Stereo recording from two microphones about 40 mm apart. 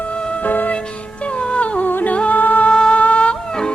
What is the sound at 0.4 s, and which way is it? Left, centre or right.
Music, left.